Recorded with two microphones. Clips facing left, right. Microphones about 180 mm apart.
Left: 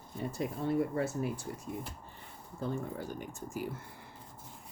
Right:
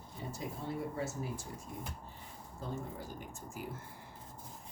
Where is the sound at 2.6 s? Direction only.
65° left (ahead or behind).